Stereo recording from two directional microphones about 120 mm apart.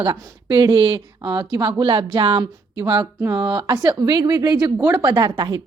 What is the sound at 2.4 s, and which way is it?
A woman's voice, 35° right (ahead or behind).